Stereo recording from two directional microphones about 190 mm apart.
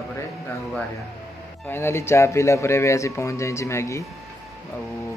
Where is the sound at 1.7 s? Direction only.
15° left (ahead or behind).